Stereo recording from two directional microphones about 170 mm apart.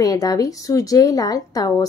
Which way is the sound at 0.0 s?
20° left (ahead or behind).